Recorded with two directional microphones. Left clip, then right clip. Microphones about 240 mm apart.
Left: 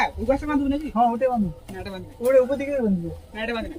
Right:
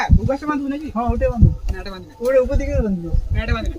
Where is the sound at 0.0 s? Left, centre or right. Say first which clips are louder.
Right 1 dB; centre.